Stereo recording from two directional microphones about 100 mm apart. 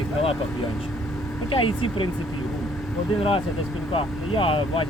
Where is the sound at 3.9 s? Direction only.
65° left (ahead or behind).